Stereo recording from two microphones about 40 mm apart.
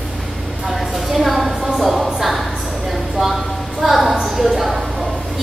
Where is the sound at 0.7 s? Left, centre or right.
Centre.